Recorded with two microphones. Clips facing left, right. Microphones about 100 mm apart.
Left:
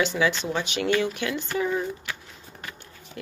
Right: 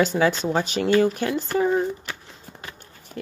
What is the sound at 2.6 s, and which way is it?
Horse, 30° right (ahead or behind).